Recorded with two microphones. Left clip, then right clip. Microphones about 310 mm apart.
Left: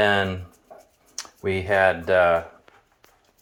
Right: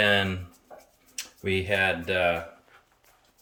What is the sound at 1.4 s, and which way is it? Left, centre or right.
Speech, left.